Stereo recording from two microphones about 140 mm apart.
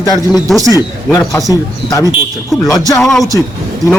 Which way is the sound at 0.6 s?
25° right (ahead or behind).